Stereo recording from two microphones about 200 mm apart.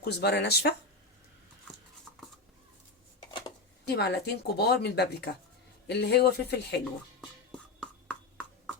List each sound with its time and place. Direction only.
0.0 s speech: 55° left (ahead or behind)
3.8 s speech: 55° left (ahead or behind)
7.8 s a sound: 5° left (ahead or behind)